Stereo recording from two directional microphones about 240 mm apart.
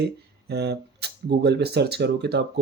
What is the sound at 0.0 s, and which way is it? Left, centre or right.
Speech, right.